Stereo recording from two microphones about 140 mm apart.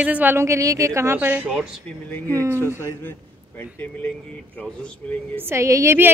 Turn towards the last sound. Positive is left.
turn(degrees=-20)  # may be behind; listen again after turning